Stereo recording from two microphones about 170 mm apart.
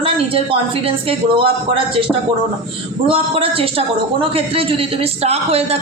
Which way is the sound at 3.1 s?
35° right (ahead or behind).